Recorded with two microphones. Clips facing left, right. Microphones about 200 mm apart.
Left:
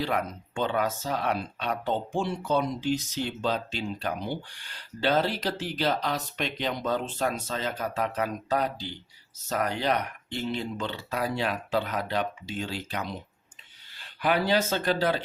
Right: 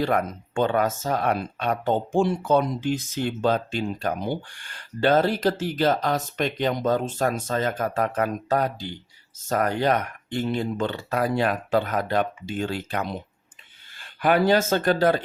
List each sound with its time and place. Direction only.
0.0 s speech: 50° right (ahead or behind)